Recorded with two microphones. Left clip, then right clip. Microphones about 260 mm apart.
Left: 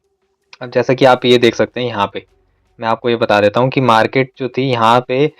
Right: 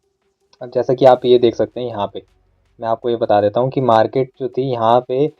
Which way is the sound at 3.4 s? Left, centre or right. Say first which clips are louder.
Left 3 dB; left.